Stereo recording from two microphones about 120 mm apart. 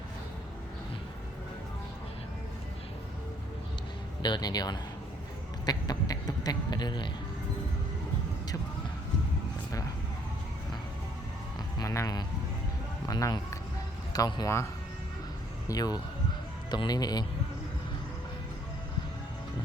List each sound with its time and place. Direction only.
4.2 s speech: 35° left (ahead or behind)
5.6 s a sound: 35° left (ahead or behind)
11.8 s speech: 30° left (ahead or behind)
15.6 s speech: 30° left (ahead or behind)